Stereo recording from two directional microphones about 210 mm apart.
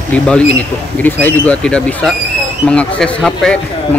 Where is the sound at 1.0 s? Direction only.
10° left (ahead or behind).